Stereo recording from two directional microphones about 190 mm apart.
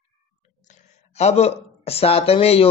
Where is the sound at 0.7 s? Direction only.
35° left (ahead or behind).